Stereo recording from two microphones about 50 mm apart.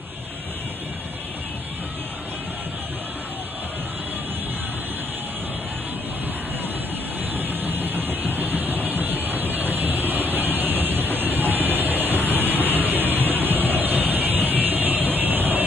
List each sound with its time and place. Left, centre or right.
7.3 s vehicle: right